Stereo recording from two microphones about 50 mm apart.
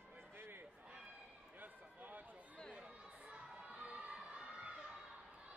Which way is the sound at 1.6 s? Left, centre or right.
Right.